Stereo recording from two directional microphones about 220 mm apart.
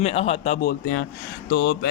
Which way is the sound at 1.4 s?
50° left (ahead or behind).